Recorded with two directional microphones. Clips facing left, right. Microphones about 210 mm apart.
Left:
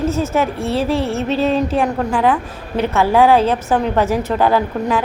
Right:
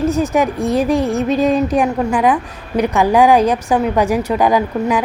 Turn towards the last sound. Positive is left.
turn(degrees=-15)  # may be behind; listen again after turning